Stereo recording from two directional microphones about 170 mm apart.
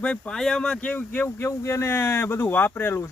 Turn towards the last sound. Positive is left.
turn(degrees=15)  # may be behind; listen again after turning